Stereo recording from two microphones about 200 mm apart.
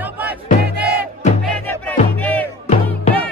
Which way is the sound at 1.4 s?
10° left (ahead or behind).